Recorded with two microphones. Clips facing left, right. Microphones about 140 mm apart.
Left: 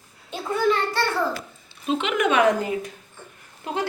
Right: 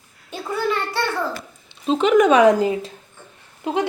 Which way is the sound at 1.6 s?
30° right (ahead or behind).